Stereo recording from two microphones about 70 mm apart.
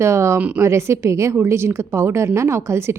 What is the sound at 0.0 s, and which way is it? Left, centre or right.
Speech, right.